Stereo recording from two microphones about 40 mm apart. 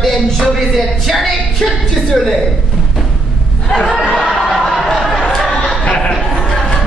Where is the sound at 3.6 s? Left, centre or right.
Centre.